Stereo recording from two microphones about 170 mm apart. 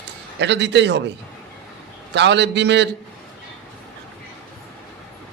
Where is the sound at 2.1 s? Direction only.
90° right.